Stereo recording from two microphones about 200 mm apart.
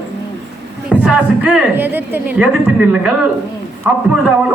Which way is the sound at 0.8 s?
5° right (ahead or behind).